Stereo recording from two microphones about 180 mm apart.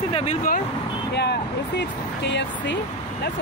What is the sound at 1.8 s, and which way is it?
Speech, 75° left (ahead or behind).